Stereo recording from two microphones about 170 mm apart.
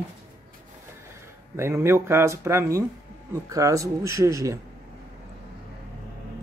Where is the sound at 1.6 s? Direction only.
15° right (ahead or behind).